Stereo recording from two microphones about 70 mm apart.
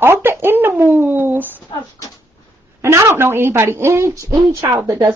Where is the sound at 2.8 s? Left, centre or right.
Right.